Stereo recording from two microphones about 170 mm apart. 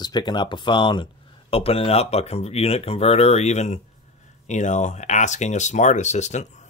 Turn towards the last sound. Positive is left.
turn(degrees=40)  # may be behind; listen again after turning